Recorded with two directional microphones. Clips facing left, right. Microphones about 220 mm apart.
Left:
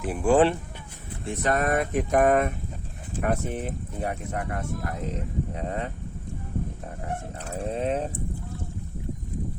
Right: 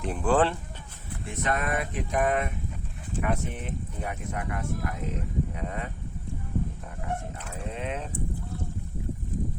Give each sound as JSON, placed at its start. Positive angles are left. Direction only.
{"t": 0.0, "sound": "speech", "side_deg": 10}
{"t": 1.2, "sound": "speech", "side_deg": 35}
{"t": 7.3, "sound": "speech", "side_deg": 35}